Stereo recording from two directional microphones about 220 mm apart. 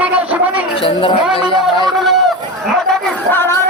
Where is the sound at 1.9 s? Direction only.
Centre (ahead or behind).